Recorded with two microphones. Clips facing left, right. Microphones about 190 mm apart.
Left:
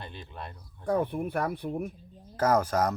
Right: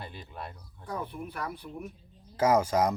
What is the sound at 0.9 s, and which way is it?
Speech, 55° left (ahead or behind).